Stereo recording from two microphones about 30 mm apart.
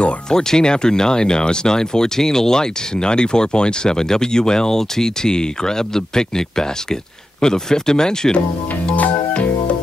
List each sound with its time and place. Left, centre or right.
0.3 s speech: left
8.9 s music: left